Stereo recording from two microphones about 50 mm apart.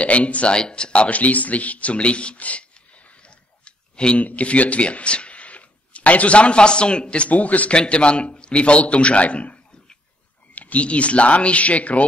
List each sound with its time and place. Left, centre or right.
0.0 s speech: left
7.7 s a man's voice: left